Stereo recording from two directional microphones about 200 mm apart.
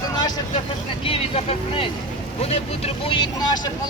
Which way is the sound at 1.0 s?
30° left (ahead or behind).